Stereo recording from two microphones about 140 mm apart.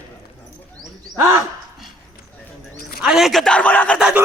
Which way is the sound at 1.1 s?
20° right (ahead or behind).